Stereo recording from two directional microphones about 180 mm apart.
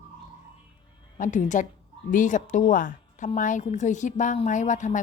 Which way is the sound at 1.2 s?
45° left (ahead or behind).